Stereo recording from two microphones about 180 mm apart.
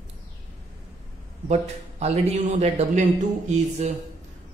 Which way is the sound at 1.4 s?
35° right (ahead or behind).